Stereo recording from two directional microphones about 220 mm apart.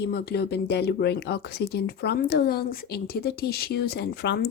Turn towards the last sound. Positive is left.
turn(degrees=50)  # may be behind; listen again after turning